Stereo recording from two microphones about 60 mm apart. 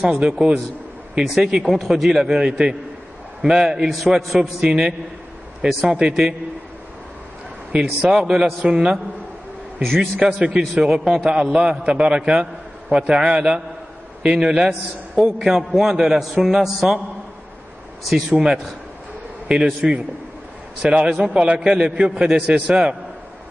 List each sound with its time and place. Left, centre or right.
0.0 s a man's voice: centre
7.7 s a man's voice: centre
9.8 s a man's voice: centre
10.1 s a man's voice: centre
18.3 s a man's voice: centre